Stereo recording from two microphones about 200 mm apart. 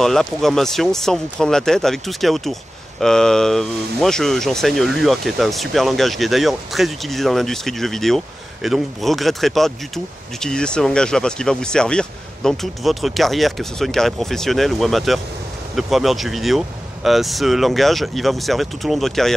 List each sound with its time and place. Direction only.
0.0 s speech: centre (ahead or behind)